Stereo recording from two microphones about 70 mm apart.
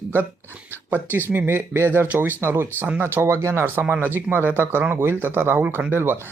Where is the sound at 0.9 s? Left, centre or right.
Right.